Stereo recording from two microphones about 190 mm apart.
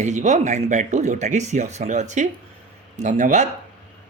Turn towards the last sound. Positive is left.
turn(degrees=-40)  # may be behind; listen again after turning